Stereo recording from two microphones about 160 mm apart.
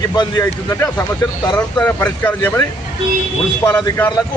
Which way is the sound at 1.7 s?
10° left (ahead or behind).